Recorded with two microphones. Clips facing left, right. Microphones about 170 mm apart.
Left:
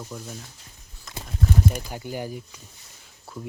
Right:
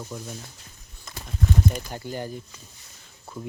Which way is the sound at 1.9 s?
10° left (ahead or behind).